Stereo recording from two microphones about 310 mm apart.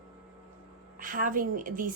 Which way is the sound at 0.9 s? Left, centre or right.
Right.